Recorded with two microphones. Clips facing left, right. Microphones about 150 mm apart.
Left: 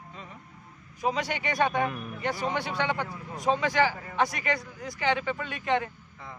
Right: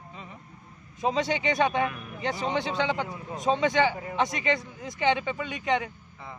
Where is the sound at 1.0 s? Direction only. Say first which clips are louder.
Right 3 dB; 25° right (ahead or behind).